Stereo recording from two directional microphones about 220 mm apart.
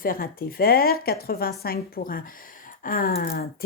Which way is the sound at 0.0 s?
40° left (ahead or behind).